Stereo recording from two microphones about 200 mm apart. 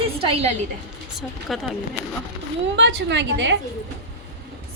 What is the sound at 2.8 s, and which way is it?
Speech, 65° right (ahead or behind).